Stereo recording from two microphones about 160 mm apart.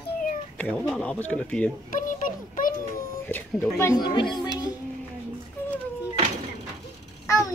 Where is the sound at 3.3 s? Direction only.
10° left (ahead or behind).